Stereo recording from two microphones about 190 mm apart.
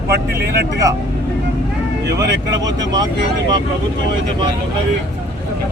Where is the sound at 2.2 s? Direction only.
20° right (ahead or behind).